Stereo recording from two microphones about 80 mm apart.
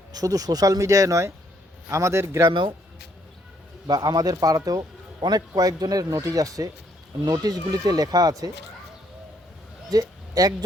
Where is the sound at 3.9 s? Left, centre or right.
Right.